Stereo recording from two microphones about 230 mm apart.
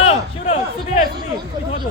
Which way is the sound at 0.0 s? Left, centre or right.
Left.